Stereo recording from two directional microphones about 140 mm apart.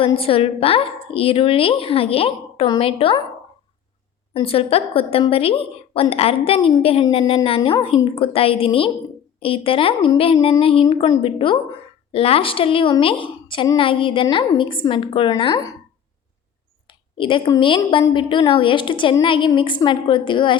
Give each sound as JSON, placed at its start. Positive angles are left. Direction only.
{"t": 0.0, "sound": "a woman's voice", "side_deg": 40}
{"t": 4.4, "sound": "a woman's voice", "side_deg": 45}
{"t": 17.2, "sound": "a woman's voice", "side_deg": 35}